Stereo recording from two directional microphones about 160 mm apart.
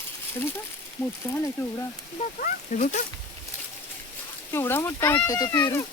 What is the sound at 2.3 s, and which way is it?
Speech, 55° left (ahead or behind).